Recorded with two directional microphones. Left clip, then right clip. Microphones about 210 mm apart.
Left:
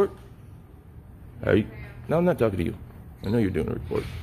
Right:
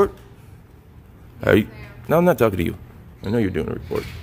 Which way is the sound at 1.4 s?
25° right (ahead or behind).